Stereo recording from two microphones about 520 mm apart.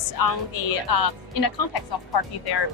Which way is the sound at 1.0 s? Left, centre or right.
Left.